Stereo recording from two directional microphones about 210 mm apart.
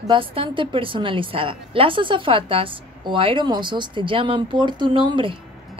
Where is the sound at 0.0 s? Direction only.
25° right (ahead or behind).